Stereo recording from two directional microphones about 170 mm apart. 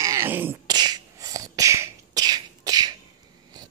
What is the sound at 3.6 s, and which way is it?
Insect, 25° right (ahead or behind).